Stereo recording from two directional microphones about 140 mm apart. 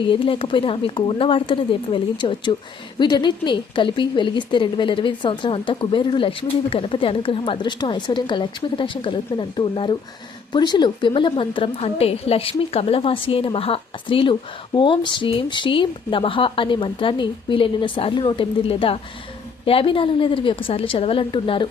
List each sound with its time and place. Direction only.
0.0 s a woman's voice: 35° left (ahead or behind)